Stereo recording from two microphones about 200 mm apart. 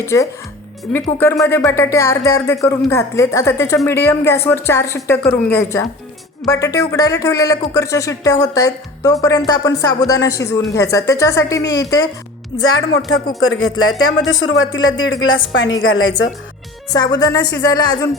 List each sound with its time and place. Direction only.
0.0 s speech: 15° left (ahead or behind)
12.6 s speech: 90° left
14.3 s speech: 75° left (ahead or behind)
16.9 s speech: 20° left (ahead or behind)